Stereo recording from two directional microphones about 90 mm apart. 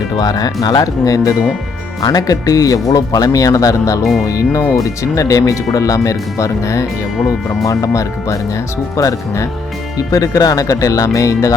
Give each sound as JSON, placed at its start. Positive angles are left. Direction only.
{"t": 0.2, "sound": "speech", "side_deg": 45}
{"t": 4.0, "sound": "speech", "side_deg": 0}
{"t": 4.3, "sound": "speech", "side_deg": 40}
{"t": 7.2, "sound": "speech", "side_deg": 0}
{"t": 7.7, "sound": "speech", "side_deg": 35}